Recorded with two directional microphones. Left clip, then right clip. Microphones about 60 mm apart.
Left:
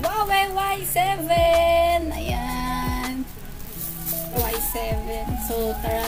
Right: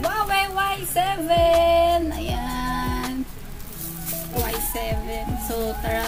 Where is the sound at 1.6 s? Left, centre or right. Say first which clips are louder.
Right 1 dB; centre.